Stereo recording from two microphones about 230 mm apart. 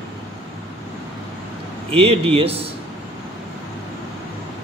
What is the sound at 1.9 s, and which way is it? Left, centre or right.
Speech, right.